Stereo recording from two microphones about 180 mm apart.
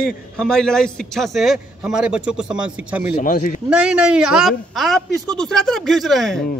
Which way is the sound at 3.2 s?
45° left (ahead or behind).